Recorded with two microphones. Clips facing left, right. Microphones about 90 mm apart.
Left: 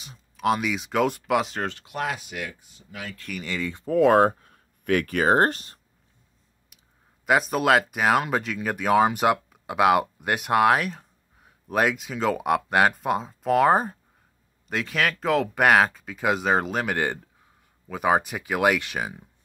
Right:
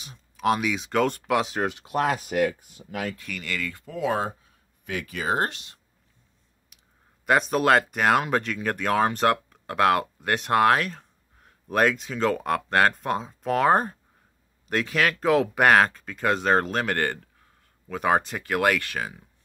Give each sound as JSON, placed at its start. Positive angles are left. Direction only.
{"t": 0.0, "sound": "speech", "side_deg": 0}
{"t": 1.9, "sound": "speech", "side_deg": -40}
{"t": 3.3, "sound": "speech", "side_deg": 20}
{"t": 3.9, "sound": "speech", "side_deg": 55}
{"t": 6.7, "sound": "clicking", "side_deg": 0}
{"t": 7.2, "sound": "speech", "side_deg": 5}